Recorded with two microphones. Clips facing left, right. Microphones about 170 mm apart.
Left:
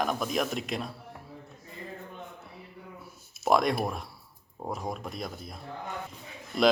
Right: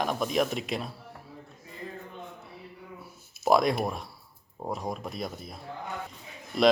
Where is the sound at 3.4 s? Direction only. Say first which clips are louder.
Right 1 dB; centre (ahead or behind).